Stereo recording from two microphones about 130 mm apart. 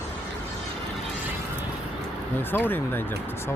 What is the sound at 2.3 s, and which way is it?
Speech, 15° left (ahead or behind).